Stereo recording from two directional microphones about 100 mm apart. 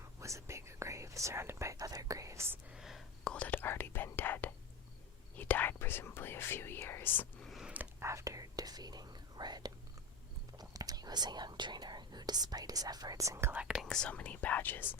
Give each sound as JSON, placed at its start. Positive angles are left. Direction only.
{"t": 0.2, "sound": "whispering", "side_deg": -30}
{"t": 1.7, "sound": "speech", "side_deg": -35}
{"t": 2.7, "sound": "whispering", "side_deg": -5}
{"t": 3.2, "sound": "whispering", "side_deg": 15}
{"t": 5.4, "sound": "speech", "side_deg": 20}
{"t": 7.4, "sound": "a sound", "side_deg": 0}
{"t": 7.9, "sound": "whispering", "side_deg": -30}
{"t": 10.6, "sound": "speech", "side_deg": -40}
{"t": 13.6, "sound": "speech", "side_deg": -5}
{"t": 13.9, "sound": "speech", "side_deg": 10}